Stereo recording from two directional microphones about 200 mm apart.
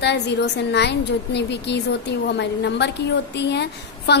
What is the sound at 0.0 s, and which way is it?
A woman's voice, 60° left (ahead or behind).